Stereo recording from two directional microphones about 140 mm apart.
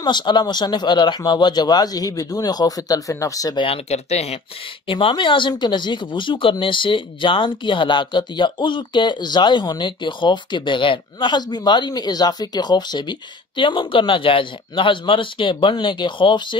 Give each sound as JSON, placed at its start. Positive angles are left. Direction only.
{"t": 0.0, "sound": "speech", "side_deg": 30}
{"t": 3.6, "sound": "speech", "side_deg": 45}
{"t": 4.8, "sound": "speech", "side_deg": 40}